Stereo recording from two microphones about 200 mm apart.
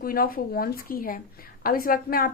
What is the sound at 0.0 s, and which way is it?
A woman's voice, 45° left (ahead or behind).